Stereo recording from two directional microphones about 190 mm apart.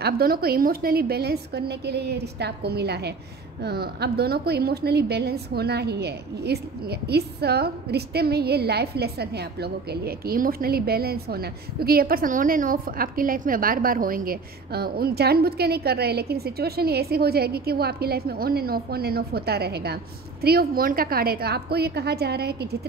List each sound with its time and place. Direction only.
0.0 s a woman's voice: 55° right (ahead or behind)